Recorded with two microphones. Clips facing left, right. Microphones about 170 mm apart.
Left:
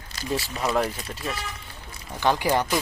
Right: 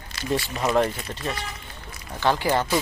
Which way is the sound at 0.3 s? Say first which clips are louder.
Right 3 dB; centre (ahead or behind).